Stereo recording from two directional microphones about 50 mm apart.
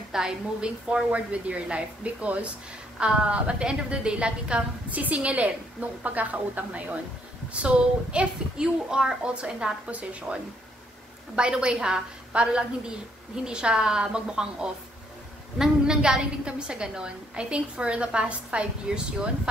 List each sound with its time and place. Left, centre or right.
0.1 s a woman's voice: centre